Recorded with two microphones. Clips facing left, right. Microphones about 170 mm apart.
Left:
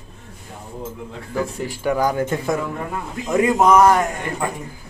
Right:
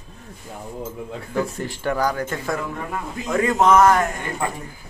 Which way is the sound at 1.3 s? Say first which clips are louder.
Left 1 dB; 10° left (ahead or behind).